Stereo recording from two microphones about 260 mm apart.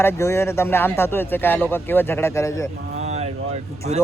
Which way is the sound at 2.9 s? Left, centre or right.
Right.